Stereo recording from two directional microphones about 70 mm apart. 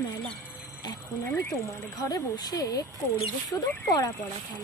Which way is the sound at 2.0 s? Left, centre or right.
Left.